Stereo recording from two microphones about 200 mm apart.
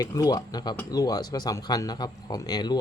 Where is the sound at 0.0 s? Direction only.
15° left (ahead or behind).